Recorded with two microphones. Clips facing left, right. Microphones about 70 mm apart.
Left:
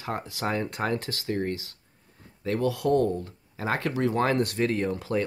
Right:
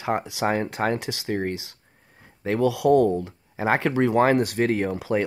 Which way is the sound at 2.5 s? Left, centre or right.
Right.